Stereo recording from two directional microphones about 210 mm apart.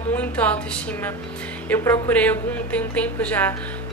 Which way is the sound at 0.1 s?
5° left (ahead or behind).